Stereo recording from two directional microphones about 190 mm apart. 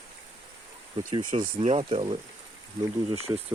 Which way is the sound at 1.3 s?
30° right (ahead or behind).